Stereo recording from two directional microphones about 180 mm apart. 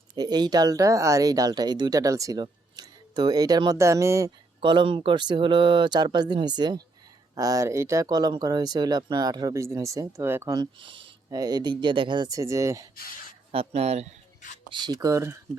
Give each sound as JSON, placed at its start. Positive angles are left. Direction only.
{"t": 0.2, "sound": "speech", "side_deg": -25}
{"t": 13.5, "sound": "speech", "side_deg": -35}
{"t": 14.7, "sound": "speech", "side_deg": -25}